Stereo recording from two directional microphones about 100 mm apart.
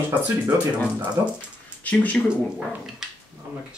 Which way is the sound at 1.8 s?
15° left (ahead or behind).